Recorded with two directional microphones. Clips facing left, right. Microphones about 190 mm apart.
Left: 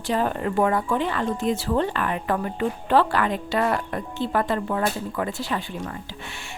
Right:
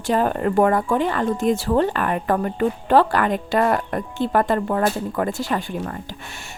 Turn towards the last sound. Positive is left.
turn(degrees=-45)  # may be behind; listen again after turning